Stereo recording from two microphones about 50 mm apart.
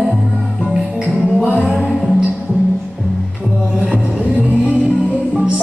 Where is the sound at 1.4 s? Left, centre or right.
Centre.